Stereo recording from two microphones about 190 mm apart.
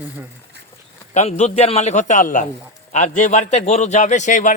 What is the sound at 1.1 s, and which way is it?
Speech, 35° left (ahead or behind).